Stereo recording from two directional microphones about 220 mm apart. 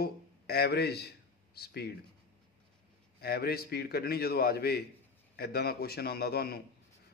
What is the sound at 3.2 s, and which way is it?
A man's voice, 45° left (ahead or behind).